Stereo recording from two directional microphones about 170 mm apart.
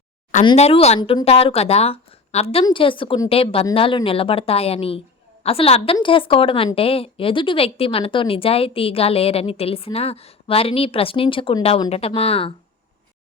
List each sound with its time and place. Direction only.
0.4 s speech: 35° left (ahead or behind)